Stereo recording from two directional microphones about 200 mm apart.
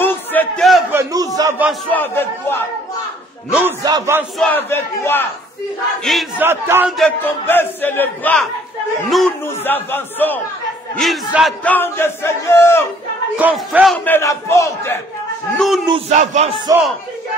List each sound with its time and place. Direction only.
0.0 s a sound: 10° left (ahead or behind)
0.9 s a sound: 20° right (ahead or behind)
1.7 s speech: 10° left (ahead or behind)
3.8 s speech: 15° right (ahead or behind)
4.4 s speech: 10° left (ahead or behind)
6.0 s battle cry: centre (ahead or behind)
6.4 s speech: 10° right (ahead or behind)
7.0 s speech: 10° left (ahead or behind)
9.1 s battle cry: centre (ahead or behind)
9.6 s speech: 10° left (ahead or behind)
13.4 s speech: 5° right (ahead or behind); by 15.0 s 15° left (ahead or behind)
15.5 s battle cry: centre (ahead or behind)
16.1 s speech: 35° right (ahead or behind)